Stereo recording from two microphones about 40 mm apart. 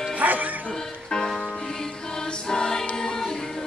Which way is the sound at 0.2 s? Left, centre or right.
Right.